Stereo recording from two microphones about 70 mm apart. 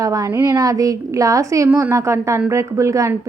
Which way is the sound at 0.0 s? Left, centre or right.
Right.